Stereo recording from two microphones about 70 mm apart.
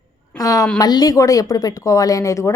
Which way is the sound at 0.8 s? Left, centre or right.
Left.